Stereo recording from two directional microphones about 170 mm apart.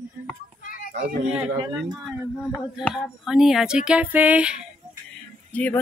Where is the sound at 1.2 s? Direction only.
10° right (ahead or behind).